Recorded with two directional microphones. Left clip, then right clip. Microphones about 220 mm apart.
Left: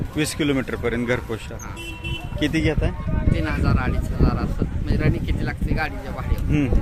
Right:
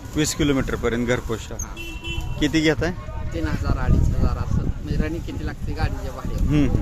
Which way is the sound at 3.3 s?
20° left (ahead or behind).